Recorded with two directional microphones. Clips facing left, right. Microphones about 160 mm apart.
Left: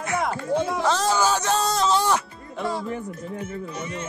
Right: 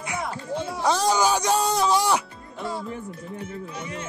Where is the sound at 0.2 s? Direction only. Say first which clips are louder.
Left 6 dB; 70° left (ahead or behind).